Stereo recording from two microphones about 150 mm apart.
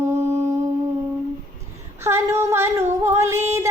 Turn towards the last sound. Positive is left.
turn(degrees=-20)  # may be behind; listen again after turning